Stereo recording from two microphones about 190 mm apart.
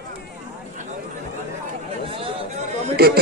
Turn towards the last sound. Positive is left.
turn(degrees=-55)  # may be behind; listen again after turning